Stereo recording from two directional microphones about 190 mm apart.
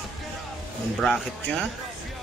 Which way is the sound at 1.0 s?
Centre (ahead or behind).